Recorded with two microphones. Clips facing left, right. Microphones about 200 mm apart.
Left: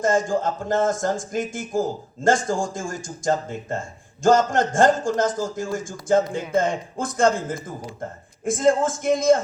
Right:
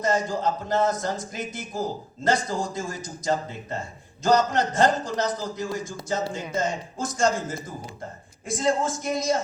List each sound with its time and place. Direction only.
0.0 s a man's voice: 50° left (ahead or behind)